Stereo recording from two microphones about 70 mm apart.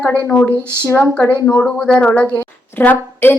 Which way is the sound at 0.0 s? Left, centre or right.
Left.